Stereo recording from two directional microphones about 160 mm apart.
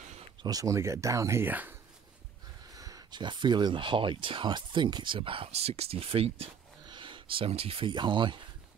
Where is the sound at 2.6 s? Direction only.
20° right (ahead or behind).